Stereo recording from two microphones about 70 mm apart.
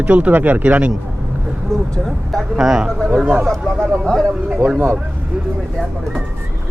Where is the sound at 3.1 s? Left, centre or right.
Right.